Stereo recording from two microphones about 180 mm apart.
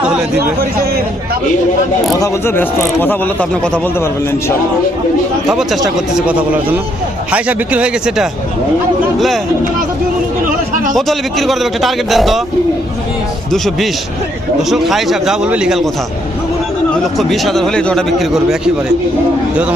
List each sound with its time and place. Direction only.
0.0 s a sound: 5° right (ahead or behind)
2.1 s speech: 15° left (ahead or behind)
6.1 s speech: 5° right (ahead or behind)
10.9 s a man's voice: centre (ahead or behind)
14.7 s a man's voice: centre (ahead or behind)
17.2 s a man's voice: centre (ahead or behind)